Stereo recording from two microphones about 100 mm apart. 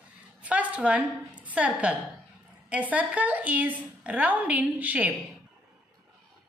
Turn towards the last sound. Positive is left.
turn(degrees=-15)  # may be behind; listen again after turning